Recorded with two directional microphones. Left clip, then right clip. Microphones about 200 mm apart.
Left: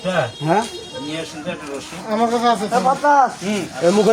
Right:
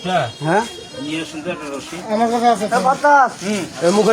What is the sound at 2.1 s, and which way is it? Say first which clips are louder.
Speech: right 2 dB; 25° left (ahead or behind).